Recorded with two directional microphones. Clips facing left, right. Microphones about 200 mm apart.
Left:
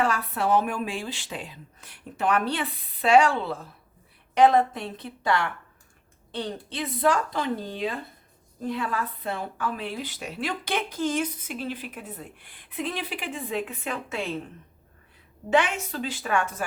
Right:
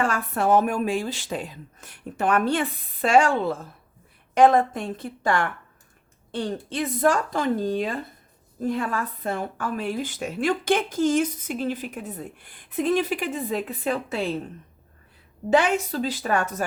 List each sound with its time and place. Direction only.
0.0 s a woman's voice: 50° right (ahead or behind)
15.4 s a woman's voice: 35° right (ahead or behind)